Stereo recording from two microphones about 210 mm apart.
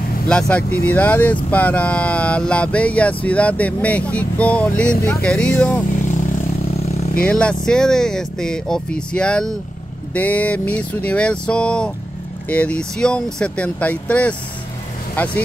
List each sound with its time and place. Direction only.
0.3 s speech: 5° left (ahead or behind)
6.8 s vehicle: 30° left (ahead or behind)
7.2 s speech: 5° left (ahead or behind)